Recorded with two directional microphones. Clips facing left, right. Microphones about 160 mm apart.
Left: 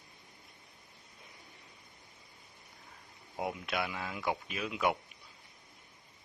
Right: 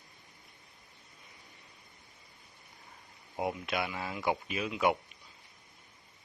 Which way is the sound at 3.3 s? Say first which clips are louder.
Right 2 dB; centre (ahead or behind).